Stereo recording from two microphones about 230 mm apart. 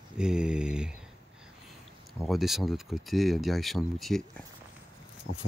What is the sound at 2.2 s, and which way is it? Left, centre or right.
Speech, centre.